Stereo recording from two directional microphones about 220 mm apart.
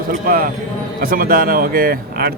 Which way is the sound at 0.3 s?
40° right (ahead or behind).